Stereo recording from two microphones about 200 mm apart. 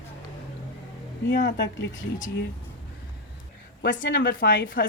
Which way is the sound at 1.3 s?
55° left (ahead or behind).